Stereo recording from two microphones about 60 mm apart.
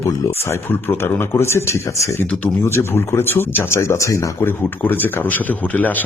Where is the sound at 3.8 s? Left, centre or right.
Left.